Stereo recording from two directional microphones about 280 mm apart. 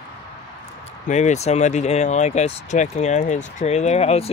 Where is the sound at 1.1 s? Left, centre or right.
Left.